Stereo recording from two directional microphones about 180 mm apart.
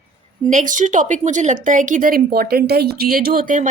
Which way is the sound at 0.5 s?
45° right (ahead or behind).